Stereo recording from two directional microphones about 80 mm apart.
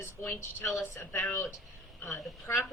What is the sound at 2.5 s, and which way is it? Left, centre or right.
Speech, left.